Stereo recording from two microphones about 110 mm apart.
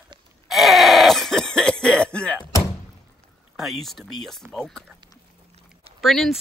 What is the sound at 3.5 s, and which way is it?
Speech, centre (ahead or behind).